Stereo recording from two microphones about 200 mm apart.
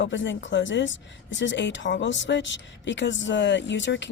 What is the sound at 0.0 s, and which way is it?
Speech, 65° left (ahead or behind).